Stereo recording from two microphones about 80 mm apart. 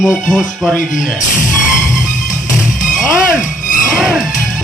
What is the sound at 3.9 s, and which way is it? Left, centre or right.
Music, centre.